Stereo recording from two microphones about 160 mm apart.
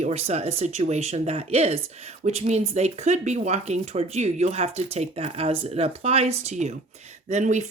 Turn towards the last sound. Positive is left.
turn(degrees=-50)  # may be behind; listen again after turning